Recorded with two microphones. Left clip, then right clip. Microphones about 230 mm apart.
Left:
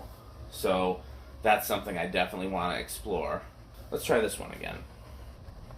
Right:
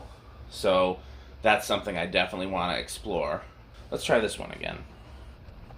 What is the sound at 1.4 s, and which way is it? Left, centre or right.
Speech, right.